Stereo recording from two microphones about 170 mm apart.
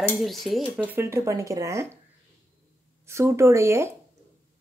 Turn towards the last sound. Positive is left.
turn(degrees=-15)  # may be behind; listen again after turning